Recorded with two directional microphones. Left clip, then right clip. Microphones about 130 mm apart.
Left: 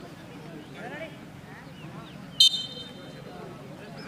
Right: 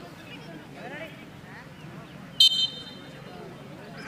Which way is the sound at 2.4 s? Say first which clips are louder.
Right 1 dB; 5° left (ahead or behind).